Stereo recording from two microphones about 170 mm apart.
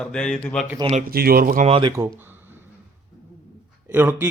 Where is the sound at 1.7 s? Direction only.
30° right (ahead or behind).